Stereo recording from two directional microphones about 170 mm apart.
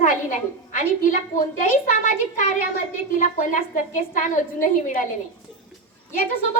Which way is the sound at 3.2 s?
45° left (ahead or behind).